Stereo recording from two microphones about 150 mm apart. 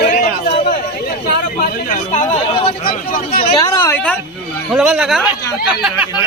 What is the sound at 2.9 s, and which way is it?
Speech, 70° left (ahead or behind).